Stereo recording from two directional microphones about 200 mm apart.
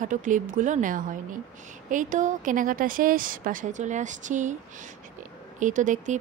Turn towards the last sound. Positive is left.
turn(degrees=-40)  # may be behind; listen again after turning